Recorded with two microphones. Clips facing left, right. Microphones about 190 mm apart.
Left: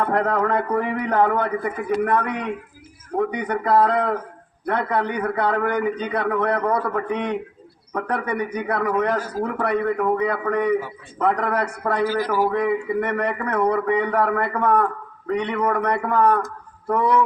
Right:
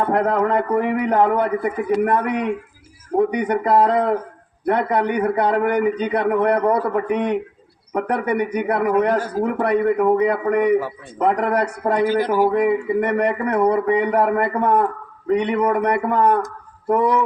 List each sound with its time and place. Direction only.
0.0 s a man's voice: 20° right (ahead or behind)
6.7 s speech: 30° right (ahead or behind)
7.9 s a man's voice: 20° right (ahead or behind)
11.8 s a man's voice: 30° right (ahead or behind); by 13.3 s 15° right (ahead or behind)
13.4 s speech: 30° right (ahead or behind)
13.7 s a man's voice: 20° right (ahead or behind)